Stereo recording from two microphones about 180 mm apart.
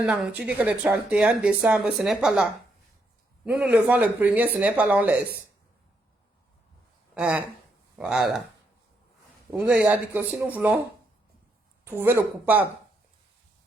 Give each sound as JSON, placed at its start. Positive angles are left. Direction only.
{"t": 0.0, "sound": "speech", "side_deg": -5}
{"t": 7.1, "sound": "speech", "side_deg": -5}
{"t": 9.5, "sound": "speech", "side_deg": -5}
{"t": 11.9, "sound": "speech", "side_deg": -10}